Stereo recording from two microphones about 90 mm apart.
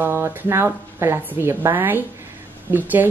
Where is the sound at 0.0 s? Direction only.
30° right (ahead or behind).